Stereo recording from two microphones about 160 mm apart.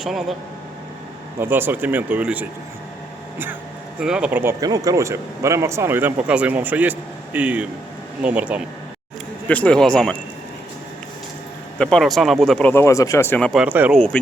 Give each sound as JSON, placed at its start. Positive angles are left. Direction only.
{"t": 0.0, "sound": "speech", "side_deg": 0}
{"t": 1.4, "sound": "speech", "side_deg": -15}
{"t": 4.0, "sound": "speech", "side_deg": -5}
{"t": 4.6, "sound": "speech", "side_deg": -25}
{"t": 9.5, "sound": "speech", "side_deg": 10}
{"t": 11.8, "sound": "speech", "side_deg": 5}
{"t": 13.5, "sound": "speech", "side_deg": -5}